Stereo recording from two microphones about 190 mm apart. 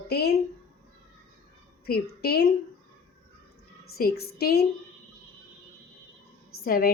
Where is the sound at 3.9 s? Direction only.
55° left (ahead or behind).